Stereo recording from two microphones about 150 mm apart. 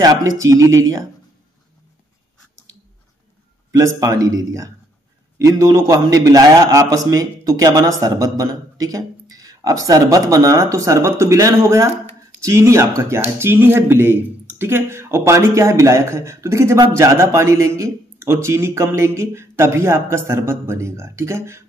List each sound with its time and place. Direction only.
0.0 s a man's voice: 25° right (ahead or behind)
3.7 s a man's voice: 20° right (ahead or behind)